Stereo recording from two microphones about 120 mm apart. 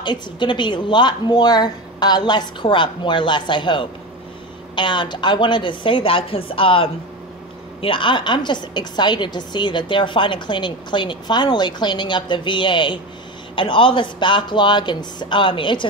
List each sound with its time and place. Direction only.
0.0 s a woman's voice: 40° left (ahead or behind)